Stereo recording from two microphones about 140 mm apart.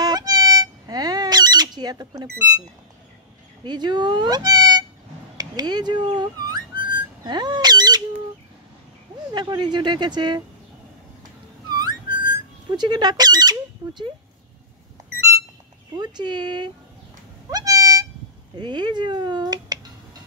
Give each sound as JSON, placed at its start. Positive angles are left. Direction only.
{"t": 0.0, "sound": "music", "side_deg": -30}
{"t": 3.6, "sound": "speech", "side_deg": -30}
{"t": 5.4, "sound": "whistling", "side_deg": -30}
{"t": 9.3, "sound": "speech", "side_deg": -30}
{"t": 11.7, "sound": "whistling", "side_deg": -30}
{"t": 12.7, "sound": "speech", "side_deg": -30}
{"t": 15.9, "sound": "speech", "side_deg": -30}
{"t": 17.5, "sound": "cat", "side_deg": -25}
{"t": 18.6, "sound": "speech", "side_deg": -30}